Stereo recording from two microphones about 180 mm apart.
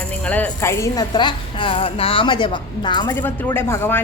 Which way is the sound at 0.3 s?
10° left (ahead or behind).